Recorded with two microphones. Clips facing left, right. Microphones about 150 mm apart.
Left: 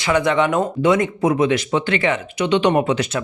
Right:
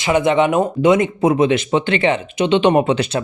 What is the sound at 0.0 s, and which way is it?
Speech, 20° right (ahead or behind).